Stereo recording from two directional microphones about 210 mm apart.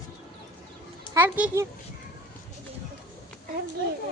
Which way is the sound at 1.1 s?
10° right (ahead or behind).